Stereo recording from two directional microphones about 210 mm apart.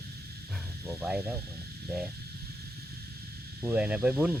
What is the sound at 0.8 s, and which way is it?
Speech, 5° right (ahead or behind).